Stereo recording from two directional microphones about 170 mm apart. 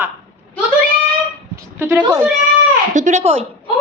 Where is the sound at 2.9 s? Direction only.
45° right (ahead or behind).